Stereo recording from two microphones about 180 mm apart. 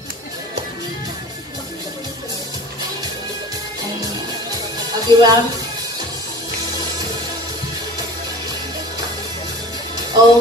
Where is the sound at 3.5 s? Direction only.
20° right (ahead or behind).